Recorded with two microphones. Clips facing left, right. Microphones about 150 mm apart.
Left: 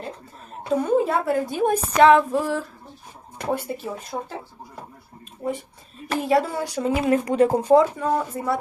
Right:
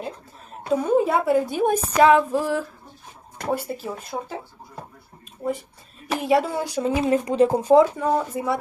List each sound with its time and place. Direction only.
0.7 s a woman's voice: 10° right (ahead or behind)
3.7 s speech: 5° left (ahead or behind)
6.1 s a woman's voice: 10° right (ahead or behind)
6.6 s speech: 20° right (ahead or behind)
7.7 s a woman's voice: 10° right (ahead or behind)